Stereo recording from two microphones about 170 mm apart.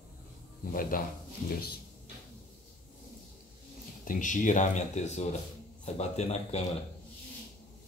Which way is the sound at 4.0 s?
50° left (ahead or behind).